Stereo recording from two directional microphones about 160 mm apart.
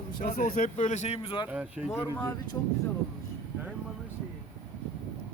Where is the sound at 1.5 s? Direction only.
5° right (ahead or behind).